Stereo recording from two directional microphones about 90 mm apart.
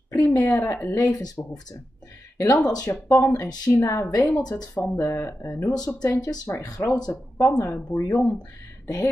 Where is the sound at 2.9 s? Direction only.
30° left (ahead or behind).